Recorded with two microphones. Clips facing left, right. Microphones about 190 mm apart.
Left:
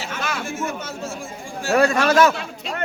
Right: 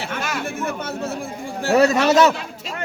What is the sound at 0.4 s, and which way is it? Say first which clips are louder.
Speech: right 2 dB; 60° right (ahead or behind).